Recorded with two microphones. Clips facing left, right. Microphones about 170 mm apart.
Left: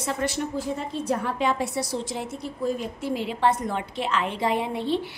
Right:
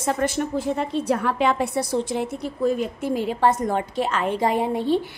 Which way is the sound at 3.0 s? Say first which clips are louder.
Right 2 dB; 45° right (ahead or behind).